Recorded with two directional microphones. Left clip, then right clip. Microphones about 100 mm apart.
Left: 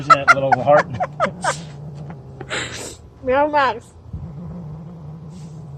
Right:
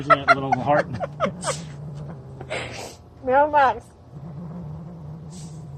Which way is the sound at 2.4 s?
55° left (ahead or behind).